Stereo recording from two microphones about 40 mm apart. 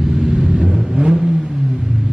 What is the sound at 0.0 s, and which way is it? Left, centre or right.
Vehicle, centre.